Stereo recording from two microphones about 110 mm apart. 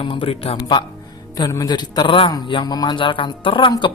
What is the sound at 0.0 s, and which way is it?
Speech, 55° left (ahead or behind).